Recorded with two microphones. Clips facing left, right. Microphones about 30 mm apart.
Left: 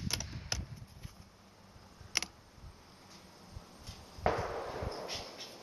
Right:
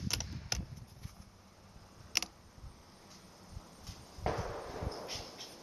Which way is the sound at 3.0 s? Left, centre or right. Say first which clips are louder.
Left 1 dB; centre.